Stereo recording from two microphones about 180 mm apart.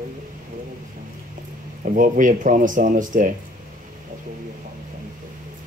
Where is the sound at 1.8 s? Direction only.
45° right (ahead or behind).